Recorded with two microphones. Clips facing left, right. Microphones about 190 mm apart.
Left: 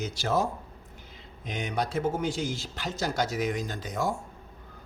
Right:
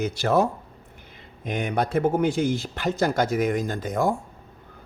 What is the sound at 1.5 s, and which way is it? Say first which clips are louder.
Speech: right 6 dB; 55° right (ahead or behind).